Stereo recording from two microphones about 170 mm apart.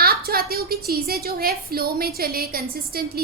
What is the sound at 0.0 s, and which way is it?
A woman's voice, 65° right (ahead or behind).